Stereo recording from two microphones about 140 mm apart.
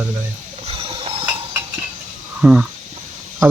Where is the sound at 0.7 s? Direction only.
40° right (ahead or behind).